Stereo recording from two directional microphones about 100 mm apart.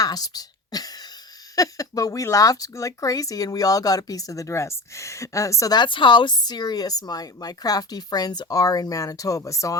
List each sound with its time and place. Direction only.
0.0 s a sound: 40° left (ahead or behind)
1.5 s speech: 35° left (ahead or behind)
5.7 s speech: 50° left (ahead or behind); by 9.7 s 35° left (ahead or behind)